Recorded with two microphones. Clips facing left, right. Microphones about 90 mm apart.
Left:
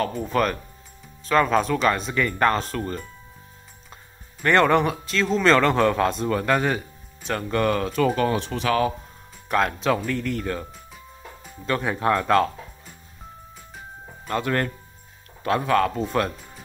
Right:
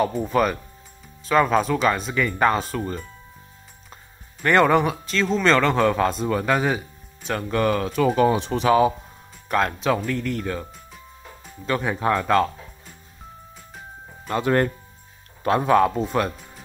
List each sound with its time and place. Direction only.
0.0 s speech: 10° right (ahead or behind)
9.5 s speech: centre (ahead or behind)
14.3 s speech: 20° right (ahead or behind)
16.0 s speech: 5° right (ahead or behind)